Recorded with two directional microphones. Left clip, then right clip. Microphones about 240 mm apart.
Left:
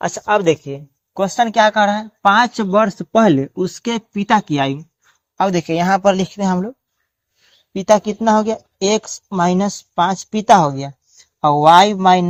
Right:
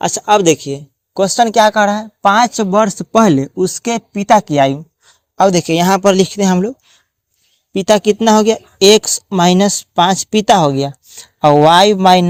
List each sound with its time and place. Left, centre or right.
0.0 s speech: right